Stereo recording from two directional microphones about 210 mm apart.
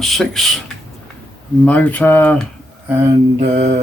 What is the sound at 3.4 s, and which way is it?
Mantra, 45° right (ahead or behind).